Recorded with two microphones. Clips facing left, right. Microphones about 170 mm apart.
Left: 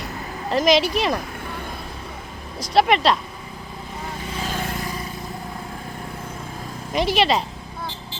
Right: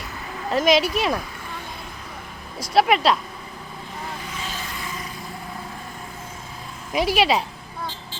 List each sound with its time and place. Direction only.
0.5 s speech: 5° right (ahead or behind)
2.7 s speech: centre (ahead or behind)
4.5 s vehicle: 50° left (ahead or behind)
6.9 s speech: 5° right (ahead or behind)